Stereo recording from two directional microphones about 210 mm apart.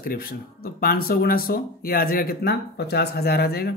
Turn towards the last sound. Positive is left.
turn(degrees=50)  # may be behind; listen again after turning